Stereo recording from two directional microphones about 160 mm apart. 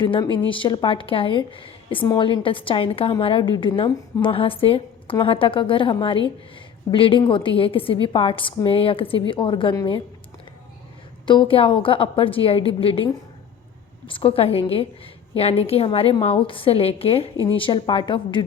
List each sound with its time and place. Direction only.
0.0 s a woman's voice: 30° left (ahead or behind)
11.3 s a woman's voice: 30° left (ahead or behind)
14.1 s a woman's voice: 35° left (ahead or behind)